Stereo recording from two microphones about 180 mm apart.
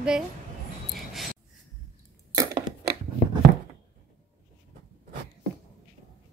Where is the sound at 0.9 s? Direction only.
Centre (ahead or behind).